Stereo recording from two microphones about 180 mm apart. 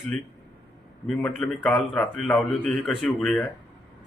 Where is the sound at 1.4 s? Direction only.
5° left (ahead or behind).